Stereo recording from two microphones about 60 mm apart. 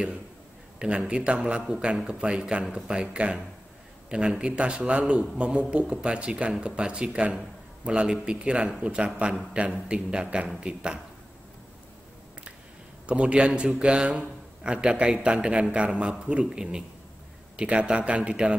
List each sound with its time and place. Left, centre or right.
0.7 s a man's voice: centre
13.0 s a man's voice: centre